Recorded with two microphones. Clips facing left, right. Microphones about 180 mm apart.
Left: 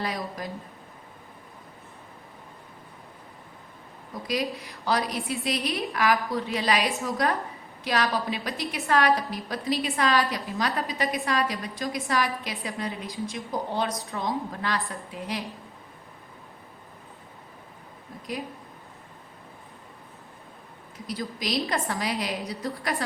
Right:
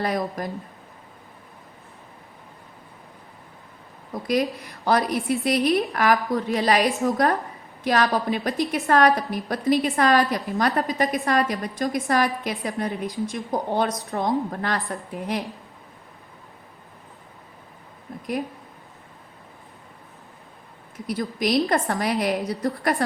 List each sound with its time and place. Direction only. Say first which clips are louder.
0.0 s a woman's voice: right 6 dB; 50° right (ahead or behind)
4.1 s a woman's voice: right 6 dB; 55° right (ahead or behind)
21.1 s a woman's voice: right 7 dB; 55° right (ahead or behind)